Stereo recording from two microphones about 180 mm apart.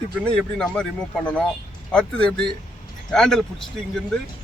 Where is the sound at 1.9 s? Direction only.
5° left (ahead or behind).